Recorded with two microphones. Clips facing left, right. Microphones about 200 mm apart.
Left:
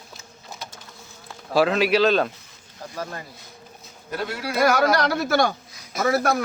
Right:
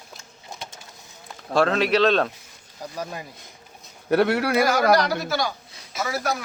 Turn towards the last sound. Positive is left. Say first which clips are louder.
# left 5 dB
turn(degrees=55)  # may be behind; listen again after turning